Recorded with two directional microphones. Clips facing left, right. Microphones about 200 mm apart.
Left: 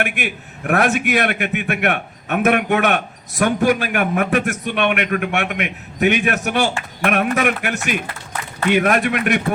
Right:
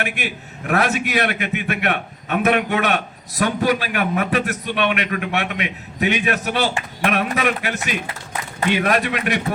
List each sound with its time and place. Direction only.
0.0 s a man's voice: 55° left (ahead or behind)